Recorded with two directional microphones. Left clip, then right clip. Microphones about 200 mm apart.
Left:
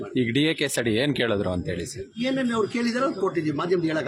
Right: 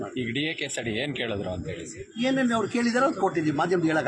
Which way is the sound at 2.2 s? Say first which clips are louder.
Even; 10° left (ahead or behind).